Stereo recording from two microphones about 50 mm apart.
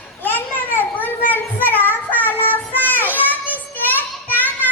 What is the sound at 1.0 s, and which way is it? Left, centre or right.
Child singing, left.